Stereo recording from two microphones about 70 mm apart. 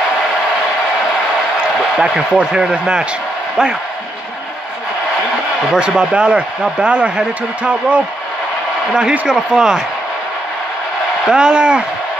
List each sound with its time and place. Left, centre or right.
2.0 s speech: centre
5.7 s speech: centre
9.3 s speech: centre
11.2 s speech: centre